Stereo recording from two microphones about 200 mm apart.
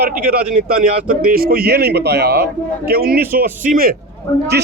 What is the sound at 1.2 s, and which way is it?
A man's voice, 45° right (ahead or behind).